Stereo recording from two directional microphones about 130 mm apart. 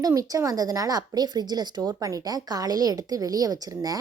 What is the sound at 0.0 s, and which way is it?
A woman's voice, 25° right (ahead or behind).